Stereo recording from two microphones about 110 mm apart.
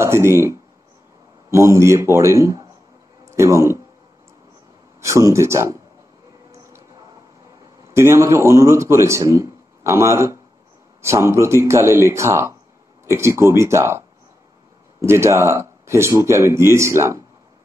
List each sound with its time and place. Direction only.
0.0 s a man's voice: 25° right (ahead or behind)
5.0 s a man's voice: 25° right (ahead or behind)
7.9 s a man's voice: 25° right (ahead or behind)